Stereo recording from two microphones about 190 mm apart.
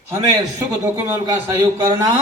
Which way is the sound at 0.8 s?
15° right (ahead or behind).